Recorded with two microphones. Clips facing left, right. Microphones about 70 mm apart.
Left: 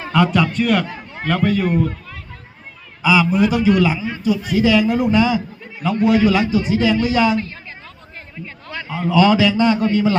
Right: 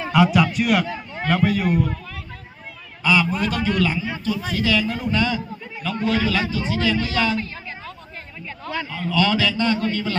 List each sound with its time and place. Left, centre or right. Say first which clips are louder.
0.0 s a man's voice: left 1 dB; centre
3.0 s a man's voice: left 5 dB; centre
8.9 s a man's voice: left 7 dB; centre